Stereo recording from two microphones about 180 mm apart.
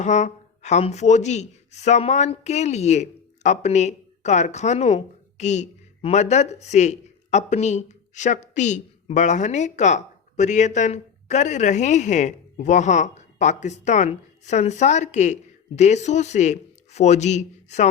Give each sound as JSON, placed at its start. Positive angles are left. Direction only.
{"t": 0.0, "sound": "speech", "side_deg": 40}